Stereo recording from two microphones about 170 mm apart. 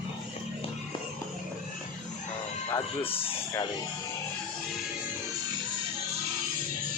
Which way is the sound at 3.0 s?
35° left (ahead or behind).